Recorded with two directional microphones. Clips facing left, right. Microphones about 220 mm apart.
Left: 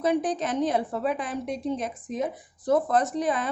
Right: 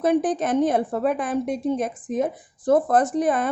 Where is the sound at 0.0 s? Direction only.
50° right (ahead or behind).